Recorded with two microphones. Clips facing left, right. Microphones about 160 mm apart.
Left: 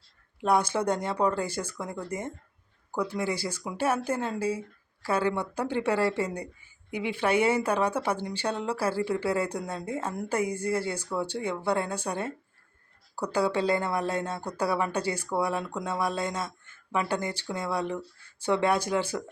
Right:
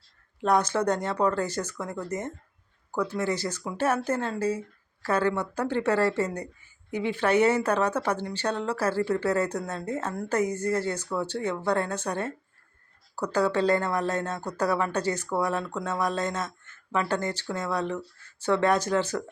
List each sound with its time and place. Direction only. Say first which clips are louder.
0.3 s speech: right 1 dB; 10° left (ahead or behind)